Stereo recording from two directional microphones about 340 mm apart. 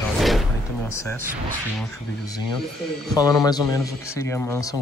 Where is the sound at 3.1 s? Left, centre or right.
Centre.